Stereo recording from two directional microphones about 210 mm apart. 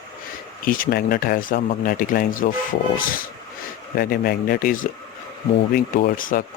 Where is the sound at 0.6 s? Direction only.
40° left (ahead or behind).